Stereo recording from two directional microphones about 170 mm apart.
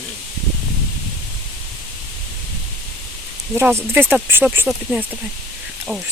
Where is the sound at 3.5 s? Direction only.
15° right (ahead or behind).